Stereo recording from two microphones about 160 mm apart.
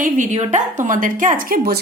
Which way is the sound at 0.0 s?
50° right (ahead or behind).